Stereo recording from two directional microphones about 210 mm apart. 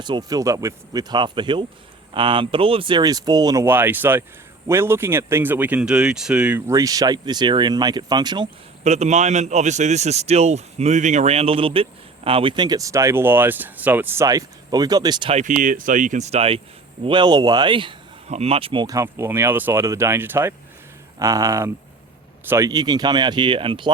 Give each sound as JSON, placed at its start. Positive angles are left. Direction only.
{"t": 0.0, "sound": "a man's voice", "side_deg": -20}
{"t": 8.8, "sound": "a man's voice", "side_deg": -35}